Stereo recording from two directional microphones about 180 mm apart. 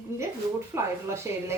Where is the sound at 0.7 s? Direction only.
15° right (ahead or behind).